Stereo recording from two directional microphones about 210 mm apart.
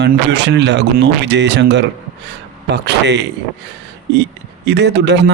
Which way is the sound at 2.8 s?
55° right (ahead or behind).